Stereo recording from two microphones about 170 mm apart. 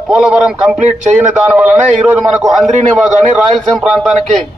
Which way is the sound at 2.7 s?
45° right (ahead or behind).